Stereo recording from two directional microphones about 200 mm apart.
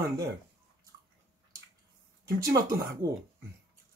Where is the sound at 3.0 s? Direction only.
15° right (ahead or behind).